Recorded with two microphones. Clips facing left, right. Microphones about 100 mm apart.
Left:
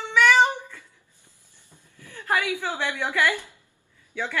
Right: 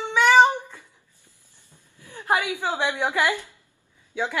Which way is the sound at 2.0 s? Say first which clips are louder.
Right 2 dB; 20° right (ahead or behind).